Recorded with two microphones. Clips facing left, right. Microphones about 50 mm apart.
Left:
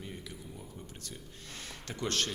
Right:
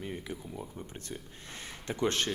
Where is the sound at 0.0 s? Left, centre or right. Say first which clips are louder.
Right 6 dB; right.